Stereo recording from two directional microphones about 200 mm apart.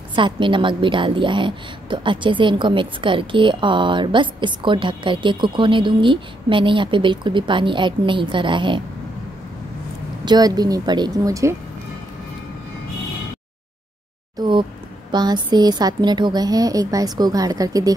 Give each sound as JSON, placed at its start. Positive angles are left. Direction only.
{"t": 0.1, "sound": "a woman's voice", "side_deg": -25}
{"t": 10.2, "sound": "a woman's voice", "side_deg": -20}
{"t": 14.4, "sound": "a woman's voice", "side_deg": -25}